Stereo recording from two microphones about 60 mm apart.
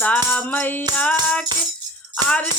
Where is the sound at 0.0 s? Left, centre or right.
Left.